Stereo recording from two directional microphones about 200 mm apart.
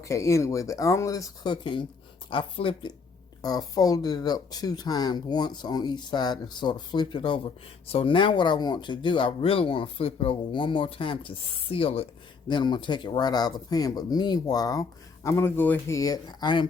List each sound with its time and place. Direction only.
0.0 s speech: 15° left (ahead or behind)